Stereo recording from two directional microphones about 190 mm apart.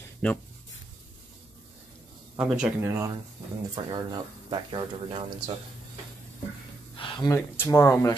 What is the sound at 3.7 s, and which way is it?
Speech, 20° right (ahead or behind).